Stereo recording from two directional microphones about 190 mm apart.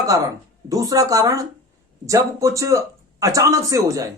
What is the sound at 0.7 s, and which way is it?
Speech, 20° right (ahead or behind).